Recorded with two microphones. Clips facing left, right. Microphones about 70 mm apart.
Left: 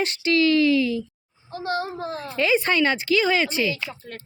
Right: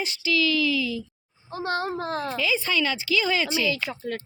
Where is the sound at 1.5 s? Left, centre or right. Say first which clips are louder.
Even; right.